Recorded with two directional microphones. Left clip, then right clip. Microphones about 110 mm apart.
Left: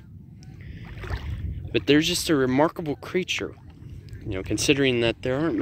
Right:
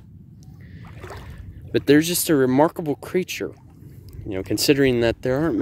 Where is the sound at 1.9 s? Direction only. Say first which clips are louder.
Right 3 dB; 90° right.